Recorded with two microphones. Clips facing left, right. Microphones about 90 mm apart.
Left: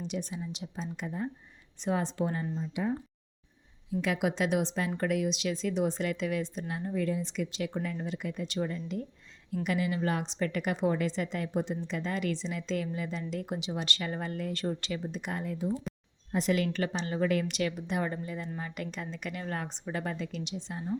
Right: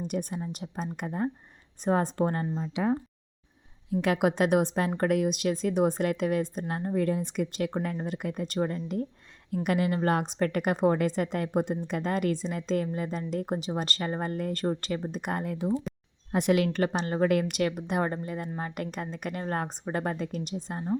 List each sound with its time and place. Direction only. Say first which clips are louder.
0.0 s a woman's voice: right 4 dB; 50° right (ahead or behind)
2.7 s speech: right 5 dB; 80° right
3.8 s a woman's voice: right 5 dB; 55° right (ahead or behind)